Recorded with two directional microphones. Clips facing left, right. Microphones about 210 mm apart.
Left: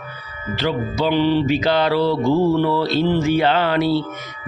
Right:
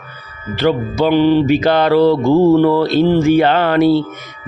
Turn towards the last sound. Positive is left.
turn(degrees=-50)  # may be behind; listen again after turning